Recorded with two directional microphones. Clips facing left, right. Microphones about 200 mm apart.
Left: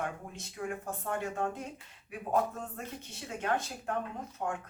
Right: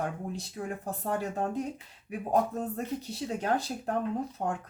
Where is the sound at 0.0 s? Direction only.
35° right (ahead or behind).